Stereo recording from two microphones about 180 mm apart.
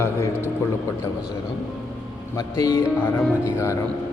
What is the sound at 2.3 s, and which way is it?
Speech, 15° left (ahead or behind).